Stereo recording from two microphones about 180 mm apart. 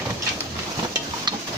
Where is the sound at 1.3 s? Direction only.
25° right (ahead or behind).